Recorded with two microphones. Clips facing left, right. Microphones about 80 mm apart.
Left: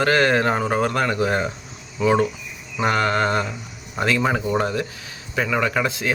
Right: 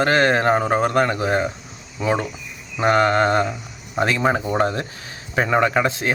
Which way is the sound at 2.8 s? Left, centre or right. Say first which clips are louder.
Right 3 dB; right.